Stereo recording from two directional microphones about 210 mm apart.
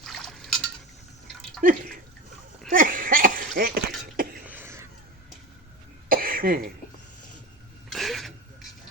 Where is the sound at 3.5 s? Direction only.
45° right (ahead or behind).